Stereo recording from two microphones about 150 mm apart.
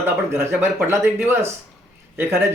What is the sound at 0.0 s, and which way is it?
Speech, 15° right (ahead or behind).